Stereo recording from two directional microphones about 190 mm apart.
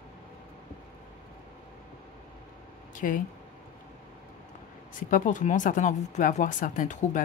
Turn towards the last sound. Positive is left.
turn(degrees=45)  # may be behind; listen again after turning